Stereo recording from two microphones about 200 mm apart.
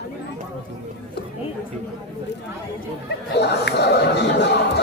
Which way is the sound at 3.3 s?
55° left (ahead or behind).